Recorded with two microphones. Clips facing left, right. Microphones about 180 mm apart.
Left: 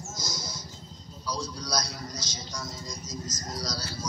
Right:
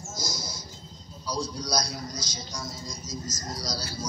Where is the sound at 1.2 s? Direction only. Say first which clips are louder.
Right 3 dB; 15° right (ahead or behind).